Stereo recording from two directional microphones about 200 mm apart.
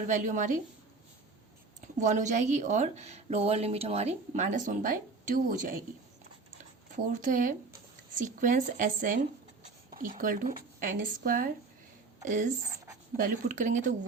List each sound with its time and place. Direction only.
0.1 s speech: 40° right (ahead or behind)
1.8 s speech: 40° right (ahead or behind)
6.9 s speech: 40° right (ahead or behind)